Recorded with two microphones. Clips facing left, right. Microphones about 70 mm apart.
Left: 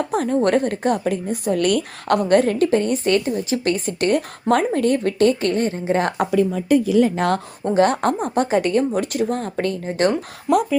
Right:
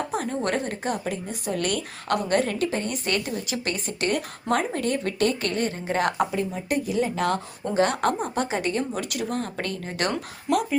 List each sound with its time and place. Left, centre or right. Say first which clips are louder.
0.1 s a woman's voice: left 8 dB; left
6.3 s speech: left 9 dB; left
7.2 s a woman's voice: left 5 dB; left
7.6 s a woman's voice: left 5 dB; left
9.8 s speech: left 8 dB; left